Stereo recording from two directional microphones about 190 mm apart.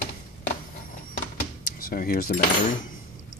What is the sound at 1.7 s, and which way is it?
Speech, 50° left (ahead or behind).